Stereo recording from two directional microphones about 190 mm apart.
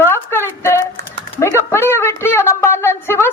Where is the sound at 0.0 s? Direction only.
10° left (ahead or behind).